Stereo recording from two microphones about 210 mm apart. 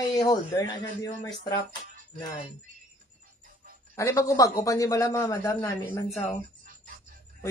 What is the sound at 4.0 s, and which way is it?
A man's voice, 15° left (ahead or behind).